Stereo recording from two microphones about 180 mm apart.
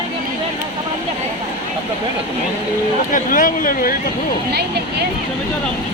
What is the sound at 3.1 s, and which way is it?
Speech, 50° left (ahead or behind).